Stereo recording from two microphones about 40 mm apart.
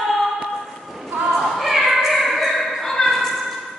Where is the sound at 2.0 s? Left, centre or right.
Centre.